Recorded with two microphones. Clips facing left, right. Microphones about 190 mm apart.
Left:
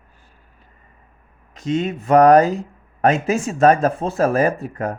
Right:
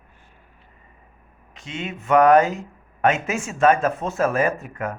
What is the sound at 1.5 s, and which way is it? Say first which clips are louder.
Speech: left 10 dB; 40° left (ahead or behind).